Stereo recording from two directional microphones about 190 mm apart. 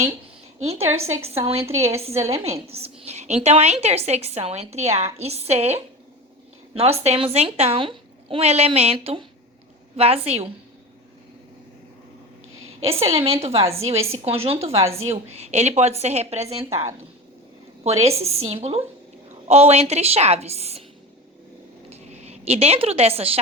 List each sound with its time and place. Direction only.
1.2 s a woman's voice: 30° right (ahead or behind)
12.8 s a woman's voice: 30° right (ahead or behind)
17.8 s a woman's voice: 35° right (ahead or behind)
21.8 s a sound: 35° right (ahead or behind)